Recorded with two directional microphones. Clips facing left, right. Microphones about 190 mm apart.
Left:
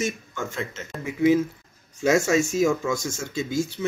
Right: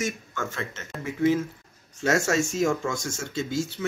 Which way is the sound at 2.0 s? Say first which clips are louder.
Left 3 dB; 10° left (ahead or behind).